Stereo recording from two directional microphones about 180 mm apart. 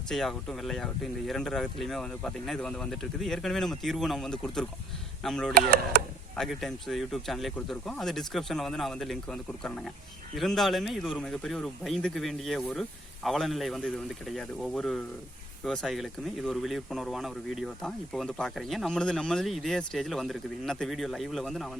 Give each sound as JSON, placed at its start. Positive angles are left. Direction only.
{"t": 0.1, "sound": "speech", "side_deg": 0}
{"t": 5.5, "sound": "speech", "side_deg": -60}
{"t": 6.3, "sound": "speech", "side_deg": 0}